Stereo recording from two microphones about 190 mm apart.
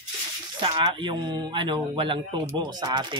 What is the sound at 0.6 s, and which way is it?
Speech, 25° right (ahead or behind).